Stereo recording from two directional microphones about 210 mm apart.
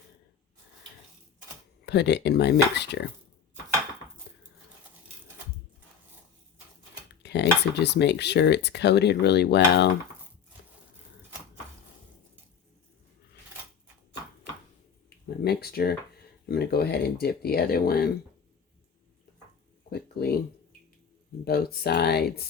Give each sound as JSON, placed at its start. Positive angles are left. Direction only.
{"t": 1.8, "sound": "speech", "side_deg": 55}
{"t": 4.3, "sound": "dishes", "side_deg": 50}
{"t": 7.2, "sound": "speech", "side_deg": 55}
{"t": 15.4, "sound": "speech", "side_deg": 45}
{"t": 19.9, "sound": "speech", "side_deg": 50}
{"t": 21.4, "sound": "speech", "side_deg": 50}